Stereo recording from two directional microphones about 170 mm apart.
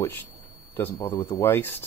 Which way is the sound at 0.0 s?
10° left (ahead or behind).